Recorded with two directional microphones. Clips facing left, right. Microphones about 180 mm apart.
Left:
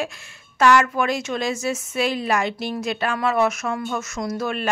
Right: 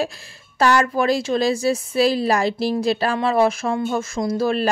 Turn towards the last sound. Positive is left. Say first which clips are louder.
# right 5 dB
turn(degrees=-35)  # may be behind; listen again after turning